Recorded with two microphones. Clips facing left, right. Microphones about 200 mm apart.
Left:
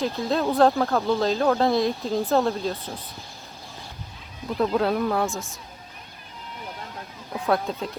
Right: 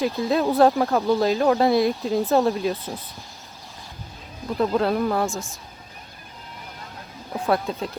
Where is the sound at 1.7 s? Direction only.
Centre (ahead or behind).